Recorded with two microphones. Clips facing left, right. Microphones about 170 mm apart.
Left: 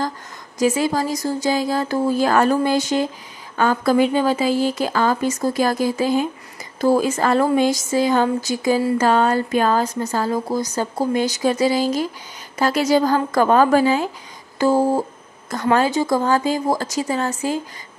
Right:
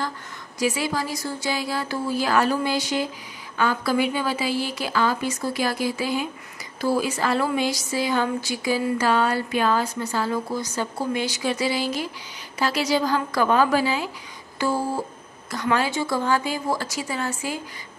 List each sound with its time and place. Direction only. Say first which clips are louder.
0.6 s speech: left 6 dB; 45° left (ahead or behind)